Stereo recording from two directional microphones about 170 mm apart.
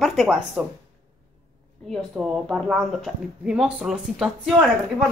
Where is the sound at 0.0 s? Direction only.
Centre (ahead or behind).